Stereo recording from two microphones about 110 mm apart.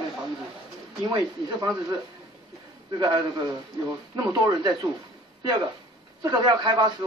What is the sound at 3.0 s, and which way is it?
A man's voice, 40° right (ahead or behind).